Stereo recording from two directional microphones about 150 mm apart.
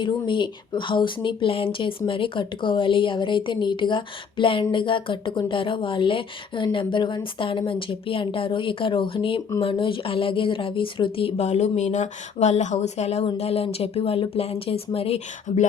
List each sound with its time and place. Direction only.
0.0 s speech: 30° left (ahead or behind)